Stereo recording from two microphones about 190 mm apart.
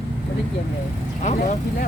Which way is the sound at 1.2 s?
40° left (ahead or behind).